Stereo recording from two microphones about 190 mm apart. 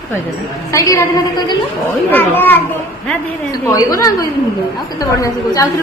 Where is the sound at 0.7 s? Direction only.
15° left (ahead or behind).